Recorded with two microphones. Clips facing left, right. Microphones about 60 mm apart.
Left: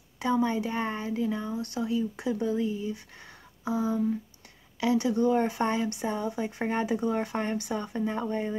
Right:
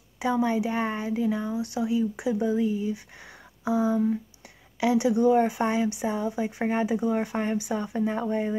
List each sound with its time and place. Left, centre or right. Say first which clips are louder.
0.2 s speech: right 2 dB; centre